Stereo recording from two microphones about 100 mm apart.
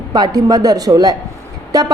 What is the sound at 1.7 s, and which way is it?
Music, 40° right (ahead or behind).